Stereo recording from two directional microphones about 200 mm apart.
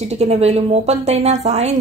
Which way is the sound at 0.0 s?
35° right (ahead or behind).